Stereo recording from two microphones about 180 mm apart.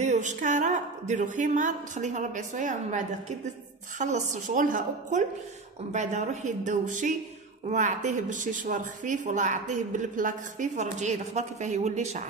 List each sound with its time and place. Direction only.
0.0 s a woman's voice: 40° right (ahead or behind)